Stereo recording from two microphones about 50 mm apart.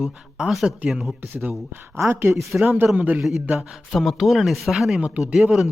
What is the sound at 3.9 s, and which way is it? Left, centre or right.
Speech, centre.